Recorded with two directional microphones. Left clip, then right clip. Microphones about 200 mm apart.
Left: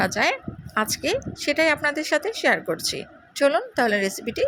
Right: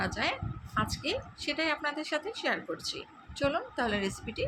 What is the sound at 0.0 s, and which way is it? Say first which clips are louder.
A woman's voice: left 10 dB; 35° left (ahead or behind).